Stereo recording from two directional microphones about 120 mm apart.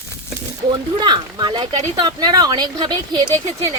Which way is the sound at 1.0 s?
40° right (ahead or behind).